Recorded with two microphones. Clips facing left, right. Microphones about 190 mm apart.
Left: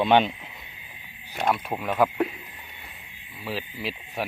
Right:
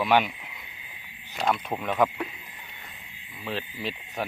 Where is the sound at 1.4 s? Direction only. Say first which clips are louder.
Left 1 dB; 5° left (ahead or behind).